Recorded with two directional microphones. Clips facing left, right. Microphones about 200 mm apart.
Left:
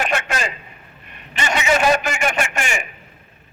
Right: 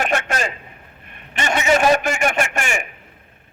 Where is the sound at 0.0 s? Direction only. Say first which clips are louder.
Right 1 dB; 45° right (ahead or behind).